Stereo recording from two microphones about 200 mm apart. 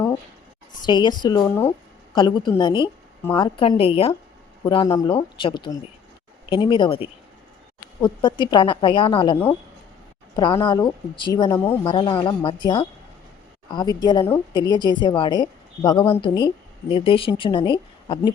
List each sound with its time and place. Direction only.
0.9 s a woman's voice: 20° left (ahead or behind)
1.5 s speech: 10° left (ahead or behind)
2.1 s a woman's voice: 20° left (ahead or behind)
8.2 s a woman's voice: 20° left (ahead or behind)
11.9 s a woman's voice: 25° left (ahead or behind)